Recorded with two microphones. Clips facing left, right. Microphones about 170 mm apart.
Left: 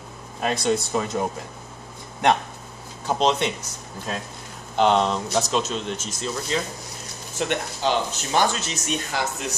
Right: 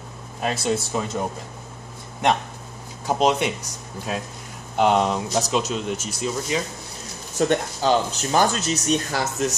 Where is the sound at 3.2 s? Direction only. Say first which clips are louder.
Right 1 dB; 10° right (ahead or behind).